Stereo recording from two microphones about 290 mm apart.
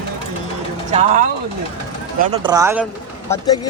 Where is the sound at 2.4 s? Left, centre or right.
Centre.